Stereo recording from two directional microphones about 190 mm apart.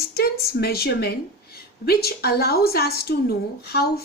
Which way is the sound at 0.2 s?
55° left (ahead or behind).